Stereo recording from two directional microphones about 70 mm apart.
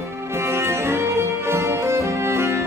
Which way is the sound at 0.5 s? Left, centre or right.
Right.